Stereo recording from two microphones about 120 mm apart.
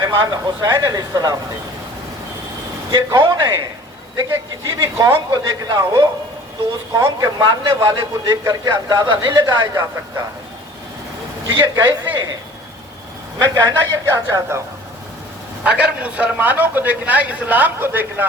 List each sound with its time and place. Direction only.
0.1 s speech: 25° right (ahead or behind)
2.9 s a man's voice: 30° right (ahead or behind)
11.5 s a man's voice: 35° right (ahead or behind)
13.4 s speech: 30° right (ahead or behind)
15.6 s a man's voice: 10° right (ahead or behind)